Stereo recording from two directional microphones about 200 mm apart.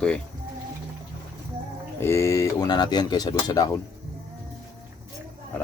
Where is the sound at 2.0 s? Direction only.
15° left (ahead or behind).